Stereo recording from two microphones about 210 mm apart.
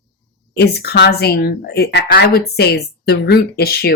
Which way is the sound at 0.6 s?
50° left (ahead or behind).